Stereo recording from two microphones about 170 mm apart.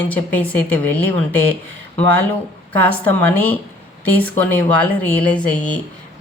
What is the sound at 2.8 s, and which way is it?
A woman's voice, 10° left (ahead or behind).